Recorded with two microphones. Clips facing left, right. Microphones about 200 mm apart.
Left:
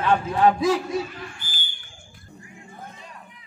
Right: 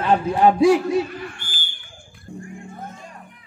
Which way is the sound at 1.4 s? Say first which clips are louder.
Right 3 dB; 30° right (ahead or behind).